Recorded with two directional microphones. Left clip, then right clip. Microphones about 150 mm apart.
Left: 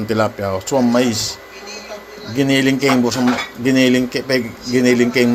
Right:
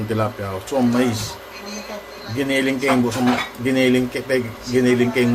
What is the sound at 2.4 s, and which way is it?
A man's voice, 45° left (ahead or behind).